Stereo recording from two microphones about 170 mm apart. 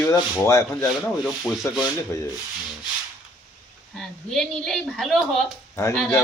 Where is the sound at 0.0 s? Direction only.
15° left (ahead or behind).